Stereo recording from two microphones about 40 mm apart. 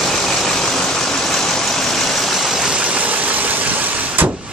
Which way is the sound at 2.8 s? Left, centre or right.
Right.